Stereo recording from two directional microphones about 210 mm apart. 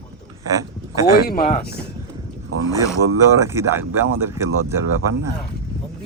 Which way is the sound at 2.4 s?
90° right.